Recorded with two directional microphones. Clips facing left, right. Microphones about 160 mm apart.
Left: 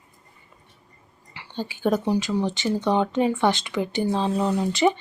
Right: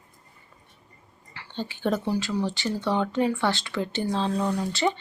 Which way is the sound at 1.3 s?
10° left (ahead or behind).